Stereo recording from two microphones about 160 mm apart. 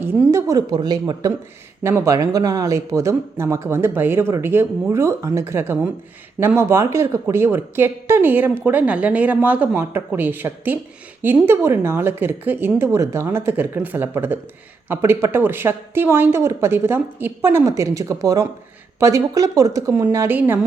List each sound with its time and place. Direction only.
0.0 s speech: 15° right (ahead or behind)